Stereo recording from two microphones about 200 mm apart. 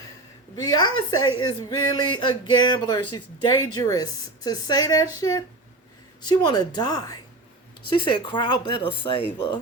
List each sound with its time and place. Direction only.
0.5 s speech: 20° left (ahead or behind)
0.9 s a woman's voice: 90° left
1.7 s speech: 20° left (ahead or behind)